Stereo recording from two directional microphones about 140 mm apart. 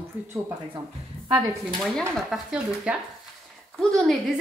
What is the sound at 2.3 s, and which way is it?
A woman's voice, 5° right (ahead or behind).